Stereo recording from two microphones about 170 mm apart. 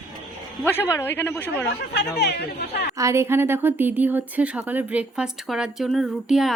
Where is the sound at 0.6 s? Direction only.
15° left (ahead or behind).